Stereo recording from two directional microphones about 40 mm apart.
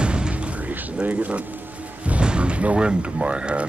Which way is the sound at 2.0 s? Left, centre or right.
Right.